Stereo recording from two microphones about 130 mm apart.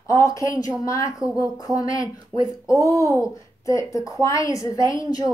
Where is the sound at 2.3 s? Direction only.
40° right (ahead or behind).